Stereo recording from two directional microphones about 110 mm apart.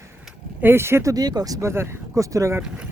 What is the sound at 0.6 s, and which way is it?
Speech, 20° right (ahead or behind).